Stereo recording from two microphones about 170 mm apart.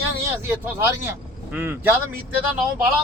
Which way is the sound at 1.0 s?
15° right (ahead or behind).